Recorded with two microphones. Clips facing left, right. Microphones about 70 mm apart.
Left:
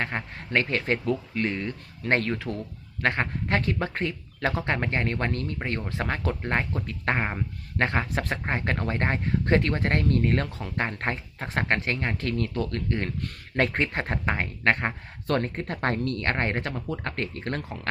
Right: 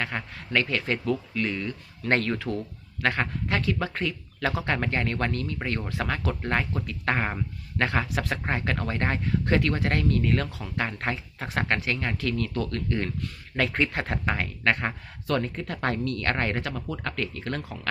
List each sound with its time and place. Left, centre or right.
0.0 s speech: left
2.0 s speech: left
13.2 s speech: left
15.4 s speech: left
16.2 s speech: left